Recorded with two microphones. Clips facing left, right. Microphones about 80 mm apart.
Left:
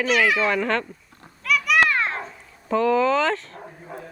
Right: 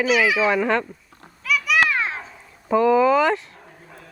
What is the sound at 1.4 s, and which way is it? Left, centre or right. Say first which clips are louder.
Children playing: even; centre.